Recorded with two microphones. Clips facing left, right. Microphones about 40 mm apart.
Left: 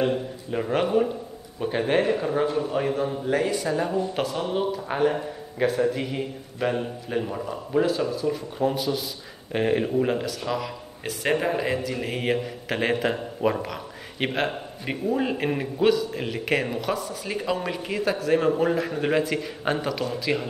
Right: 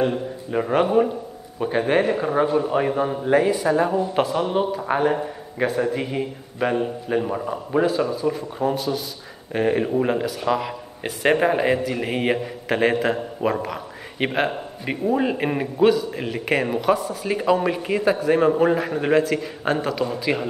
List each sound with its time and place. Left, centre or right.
0.0 s a man's voice: centre
8.7 s a man's voice: centre
20.1 s a man's voice: centre